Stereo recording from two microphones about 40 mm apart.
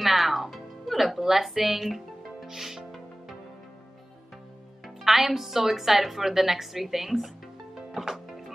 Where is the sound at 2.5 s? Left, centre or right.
Centre.